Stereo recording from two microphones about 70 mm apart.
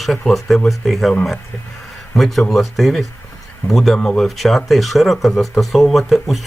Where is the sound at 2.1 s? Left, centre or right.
Centre.